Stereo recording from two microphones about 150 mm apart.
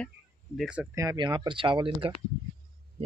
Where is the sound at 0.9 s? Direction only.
25° right (ahead or behind).